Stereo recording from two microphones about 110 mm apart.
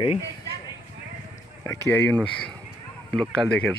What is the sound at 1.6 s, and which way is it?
Speech, 25° left (ahead or behind).